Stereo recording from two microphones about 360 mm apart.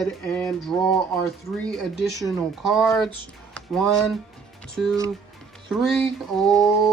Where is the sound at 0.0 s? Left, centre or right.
Centre.